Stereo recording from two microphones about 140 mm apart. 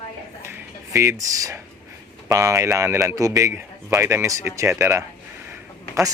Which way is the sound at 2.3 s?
20° right (ahead or behind).